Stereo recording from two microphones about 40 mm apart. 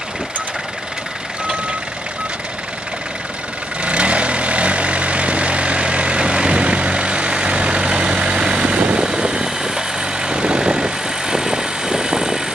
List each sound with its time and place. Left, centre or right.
3.8 s vehicle: right